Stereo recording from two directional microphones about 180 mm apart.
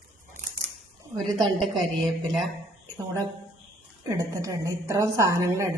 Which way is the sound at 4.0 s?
20° right (ahead or behind).